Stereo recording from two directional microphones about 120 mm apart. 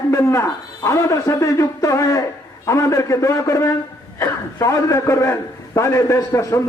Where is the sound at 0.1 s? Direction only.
25° left (ahead or behind).